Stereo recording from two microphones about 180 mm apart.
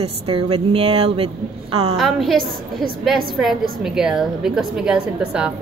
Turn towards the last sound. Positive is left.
turn(degrees=-5)  # may be behind; listen again after turning